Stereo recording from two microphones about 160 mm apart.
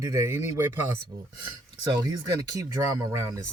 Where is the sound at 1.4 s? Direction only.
25° right (ahead or behind).